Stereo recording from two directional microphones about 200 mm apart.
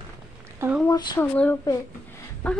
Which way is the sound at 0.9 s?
20° left (ahead or behind).